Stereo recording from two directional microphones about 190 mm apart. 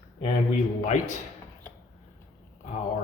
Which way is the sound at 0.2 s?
40° left (ahead or behind).